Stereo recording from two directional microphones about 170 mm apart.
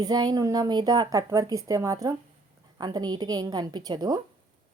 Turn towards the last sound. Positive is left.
turn(degrees=-25)  # may be behind; listen again after turning